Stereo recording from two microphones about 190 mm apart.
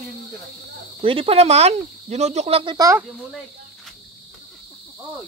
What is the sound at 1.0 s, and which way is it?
Speech, 30° right (ahead or behind).